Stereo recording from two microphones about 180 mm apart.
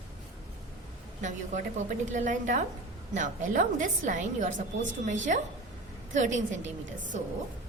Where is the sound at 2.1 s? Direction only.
45° right (ahead or behind).